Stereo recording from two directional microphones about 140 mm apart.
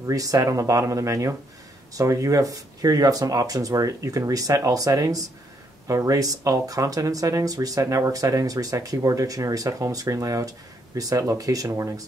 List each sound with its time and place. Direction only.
0.0 s speech: 25° right (ahead or behind)